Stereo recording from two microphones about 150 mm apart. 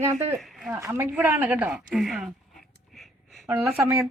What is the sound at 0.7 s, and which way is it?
Speech, 20° right (ahead or behind).